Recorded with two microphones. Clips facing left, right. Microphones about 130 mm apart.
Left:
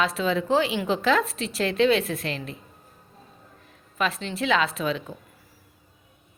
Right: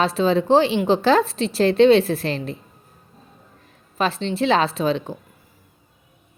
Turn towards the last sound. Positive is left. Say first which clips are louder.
# right 6 dB
turn(degrees=-30)  # may be behind; listen again after turning